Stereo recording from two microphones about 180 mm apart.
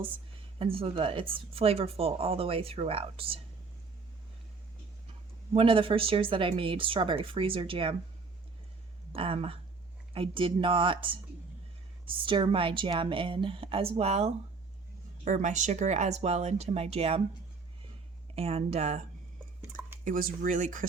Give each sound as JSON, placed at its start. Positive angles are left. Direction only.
{"t": 0.6, "sound": "a woman's voice", "side_deg": -30}
{"t": 5.5, "sound": "speech", "side_deg": -30}
{"t": 9.1, "sound": "a woman's voice", "side_deg": -30}
{"t": 18.3, "sound": "a woman's voice", "side_deg": -35}
{"t": 20.1, "sound": "speech", "side_deg": -50}